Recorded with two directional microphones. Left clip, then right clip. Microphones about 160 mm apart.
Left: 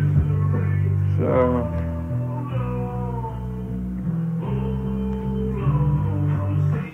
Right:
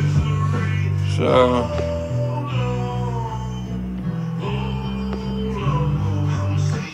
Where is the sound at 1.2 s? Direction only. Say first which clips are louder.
Right 4 dB; 25° right (ahead or behind).